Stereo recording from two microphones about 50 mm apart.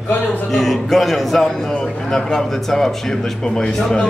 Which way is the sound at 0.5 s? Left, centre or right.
Centre.